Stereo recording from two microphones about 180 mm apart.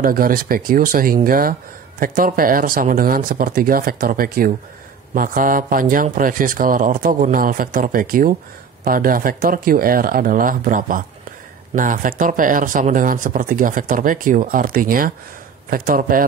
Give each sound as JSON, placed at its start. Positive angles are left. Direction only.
{"t": 0.0, "sound": "speech", "side_deg": -55}